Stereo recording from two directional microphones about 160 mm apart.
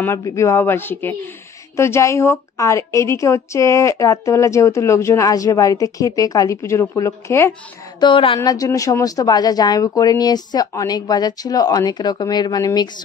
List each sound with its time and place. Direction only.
0.0 s a woman's voice: 15° left (ahead or behind)
8.0 s a woman's voice: 30° left (ahead or behind)
8.4 s a woman's voice: 20° left (ahead or behind)